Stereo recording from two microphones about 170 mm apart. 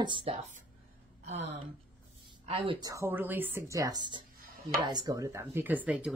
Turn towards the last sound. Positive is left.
turn(degrees=-10)  # may be behind; listen again after turning